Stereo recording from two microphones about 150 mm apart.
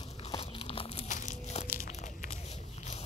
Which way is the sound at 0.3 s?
40° left (ahead or behind).